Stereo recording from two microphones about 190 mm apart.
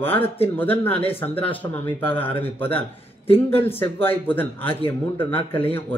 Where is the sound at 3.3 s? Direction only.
30° left (ahead or behind).